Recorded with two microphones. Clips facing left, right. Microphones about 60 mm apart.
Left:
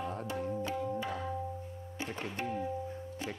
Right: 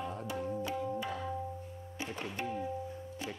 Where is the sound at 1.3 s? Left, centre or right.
Centre.